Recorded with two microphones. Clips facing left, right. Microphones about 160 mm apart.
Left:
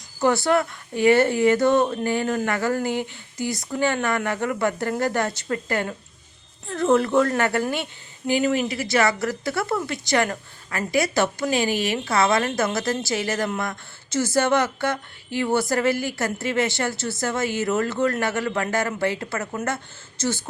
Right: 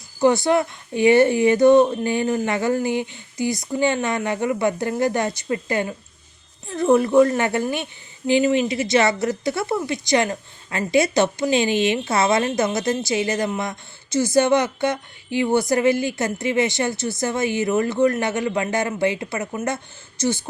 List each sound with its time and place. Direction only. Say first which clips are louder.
0.2 s speech: right 3 dB; 15° right (ahead or behind)